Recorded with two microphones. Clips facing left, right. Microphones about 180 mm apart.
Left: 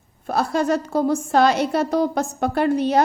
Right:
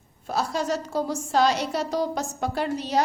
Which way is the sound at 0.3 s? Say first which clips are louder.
Left 6 dB; 55° left (ahead or behind).